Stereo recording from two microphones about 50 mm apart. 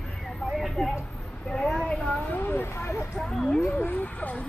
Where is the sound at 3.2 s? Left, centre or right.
Centre.